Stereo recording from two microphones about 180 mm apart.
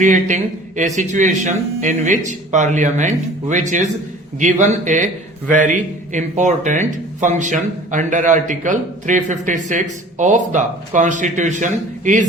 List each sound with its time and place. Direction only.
0.0 s speech: 45° right (ahead or behind)